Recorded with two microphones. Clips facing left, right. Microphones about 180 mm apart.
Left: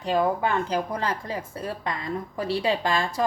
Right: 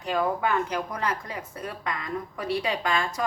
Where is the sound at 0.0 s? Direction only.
30° left (ahead or behind).